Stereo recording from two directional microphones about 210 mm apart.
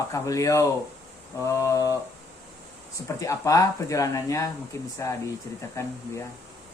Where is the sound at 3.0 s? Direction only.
15° left (ahead or behind).